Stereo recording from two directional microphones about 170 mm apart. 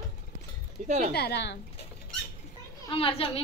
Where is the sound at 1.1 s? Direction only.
75° left (ahead or behind).